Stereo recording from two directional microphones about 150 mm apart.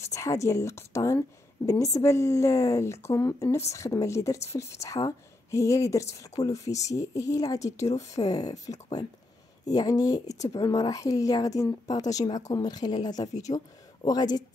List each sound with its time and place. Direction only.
0.0 s a woman's voice: 20° left (ahead or behind)